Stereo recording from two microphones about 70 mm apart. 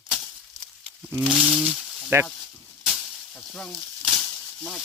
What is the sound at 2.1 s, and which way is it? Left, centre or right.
Speech, right.